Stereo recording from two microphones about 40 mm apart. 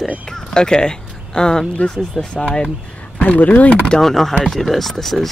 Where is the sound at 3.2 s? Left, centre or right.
Left.